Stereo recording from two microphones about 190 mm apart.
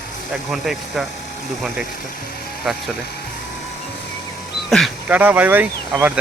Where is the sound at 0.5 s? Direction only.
Centre (ahead or behind).